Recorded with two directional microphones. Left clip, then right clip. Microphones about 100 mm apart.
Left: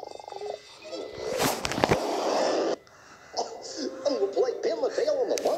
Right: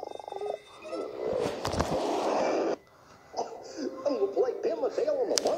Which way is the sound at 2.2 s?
15° left (ahead or behind).